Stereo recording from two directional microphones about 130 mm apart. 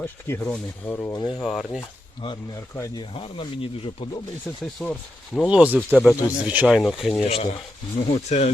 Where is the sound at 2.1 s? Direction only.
35° left (ahead or behind).